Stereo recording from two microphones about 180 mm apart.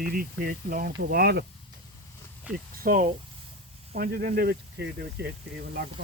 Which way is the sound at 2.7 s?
50° right (ahead or behind).